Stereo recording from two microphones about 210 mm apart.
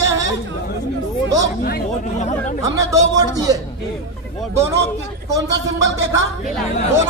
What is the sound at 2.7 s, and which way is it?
Speech, 15° right (ahead or behind).